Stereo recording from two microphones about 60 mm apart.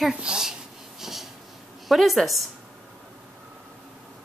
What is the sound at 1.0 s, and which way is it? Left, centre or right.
Wheeze, centre.